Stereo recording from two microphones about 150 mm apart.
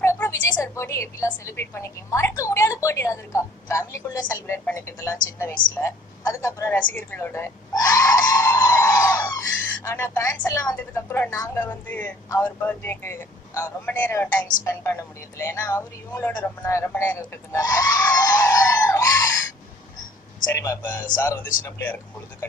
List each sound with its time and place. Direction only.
0.0 s a sound: 20° left (ahead or behind)
0.6 s a woman's voice: 20° left (ahead or behind)
20.5 s a woman's voice: 20° left (ahead or behind)